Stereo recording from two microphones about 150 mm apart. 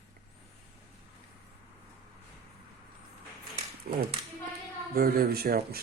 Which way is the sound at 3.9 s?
75° right (ahead or behind).